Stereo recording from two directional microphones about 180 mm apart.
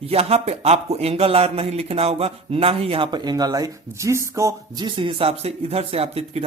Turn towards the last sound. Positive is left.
turn(degrees=-35)  # may be behind; listen again after turning